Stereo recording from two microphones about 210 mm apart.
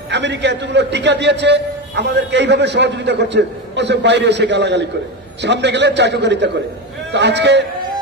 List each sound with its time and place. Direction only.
0.1 s a man's voice: 55° right (ahead or behind)